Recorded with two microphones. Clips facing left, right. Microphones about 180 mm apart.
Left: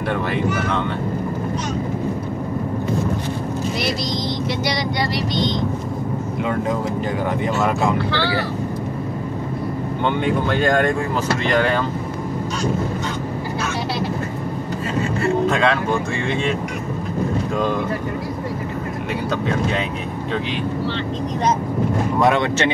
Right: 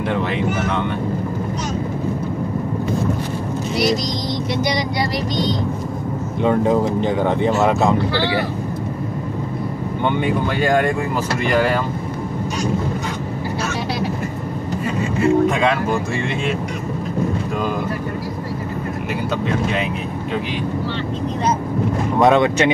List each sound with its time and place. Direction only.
6.4 s speech: 30° right (ahead or behind)
10.0 s speech: 10° right (ahead or behind)
15.1 s speech: 15° right (ahead or behind)
22.2 s speech: 20° right (ahead or behind)